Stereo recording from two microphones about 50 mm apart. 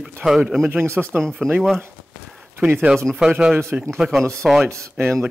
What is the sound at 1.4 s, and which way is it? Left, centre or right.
Speech, centre.